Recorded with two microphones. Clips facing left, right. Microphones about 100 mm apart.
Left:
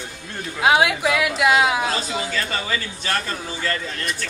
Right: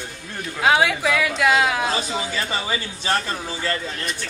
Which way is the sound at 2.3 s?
20° right (ahead or behind).